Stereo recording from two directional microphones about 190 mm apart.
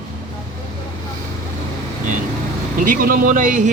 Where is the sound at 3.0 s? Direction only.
50° right (ahead or behind).